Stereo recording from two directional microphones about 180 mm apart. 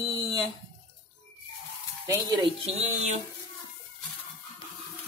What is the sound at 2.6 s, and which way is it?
Speech, 40° right (ahead or behind).